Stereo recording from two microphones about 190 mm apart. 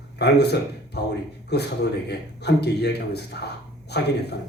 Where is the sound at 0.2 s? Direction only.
60° left (ahead or behind).